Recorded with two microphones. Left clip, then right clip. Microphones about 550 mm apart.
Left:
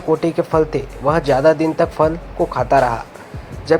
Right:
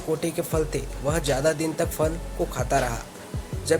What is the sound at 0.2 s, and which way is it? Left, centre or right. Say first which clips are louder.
Speech: left 10 dB; right.